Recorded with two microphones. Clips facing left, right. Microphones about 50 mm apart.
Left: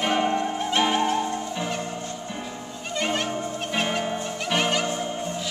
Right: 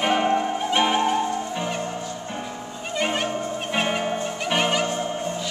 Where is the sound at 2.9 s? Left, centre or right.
Centre.